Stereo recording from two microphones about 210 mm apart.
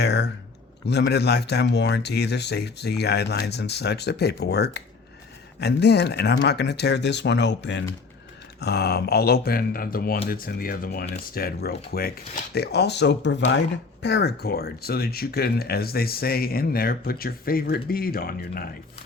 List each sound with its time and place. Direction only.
0.0 s speech: 50° left (ahead or behind)